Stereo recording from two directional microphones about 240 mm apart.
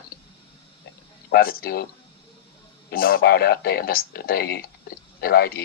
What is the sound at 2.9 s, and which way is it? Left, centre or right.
Speech, left.